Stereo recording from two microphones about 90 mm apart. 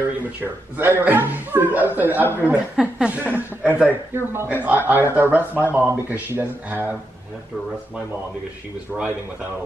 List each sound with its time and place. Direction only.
0.2 s a woman's voice: 20° right (ahead or behind)
8.9 s speech: 20° right (ahead or behind)